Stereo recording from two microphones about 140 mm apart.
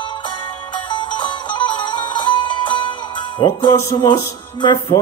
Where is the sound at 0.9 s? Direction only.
35° left (ahead or behind).